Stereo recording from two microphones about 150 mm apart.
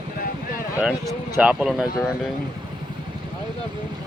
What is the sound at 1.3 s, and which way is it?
Speech, 10° right (ahead or behind).